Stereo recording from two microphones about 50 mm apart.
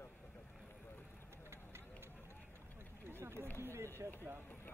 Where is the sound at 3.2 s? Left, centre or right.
Right.